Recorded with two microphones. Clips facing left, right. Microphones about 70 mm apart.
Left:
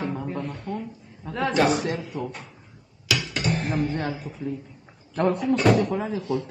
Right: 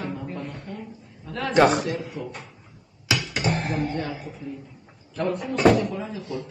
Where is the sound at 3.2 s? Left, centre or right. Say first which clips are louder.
Even; centre.